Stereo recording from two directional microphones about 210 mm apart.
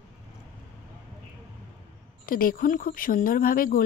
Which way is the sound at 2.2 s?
45° left (ahead or behind).